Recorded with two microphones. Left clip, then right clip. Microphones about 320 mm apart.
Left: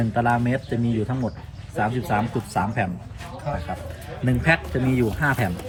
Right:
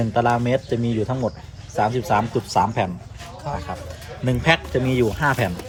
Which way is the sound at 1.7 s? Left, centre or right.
Centre.